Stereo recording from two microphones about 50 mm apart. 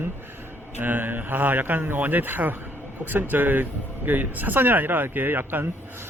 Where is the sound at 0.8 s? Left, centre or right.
Right.